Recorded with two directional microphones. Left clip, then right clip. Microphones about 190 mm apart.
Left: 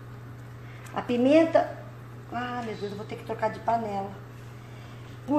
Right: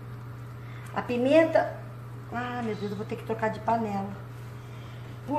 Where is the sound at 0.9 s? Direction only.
25° left (ahead or behind).